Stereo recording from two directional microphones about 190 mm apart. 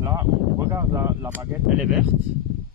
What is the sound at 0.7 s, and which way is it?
Speech, 15° right (ahead or behind).